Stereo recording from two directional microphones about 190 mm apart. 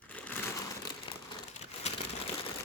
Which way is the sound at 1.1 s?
25° left (ahead or behind).